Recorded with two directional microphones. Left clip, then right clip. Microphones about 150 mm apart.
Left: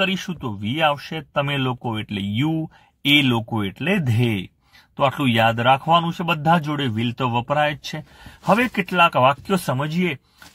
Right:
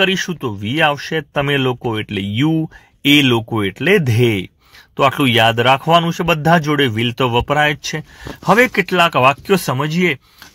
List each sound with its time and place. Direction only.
0.0 s speech: 20° right (ahead or behind)